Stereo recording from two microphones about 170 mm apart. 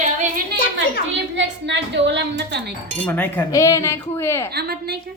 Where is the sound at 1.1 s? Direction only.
90° right.